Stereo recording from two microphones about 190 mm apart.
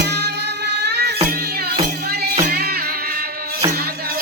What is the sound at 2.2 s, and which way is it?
Music, 55° right (ahead or behind).